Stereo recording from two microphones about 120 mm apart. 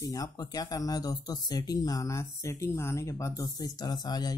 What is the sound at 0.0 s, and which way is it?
Speech, 30° left (ahead or behind).